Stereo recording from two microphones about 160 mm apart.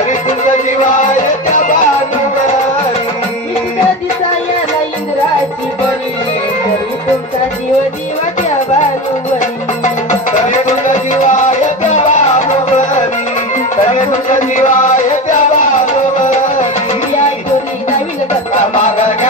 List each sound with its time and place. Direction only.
1.5 s music: 55° left (ahead or behind)
10.9 s music: 50° left (ahead or behind)